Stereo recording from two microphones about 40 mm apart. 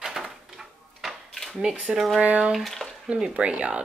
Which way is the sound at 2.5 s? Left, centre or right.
Centre.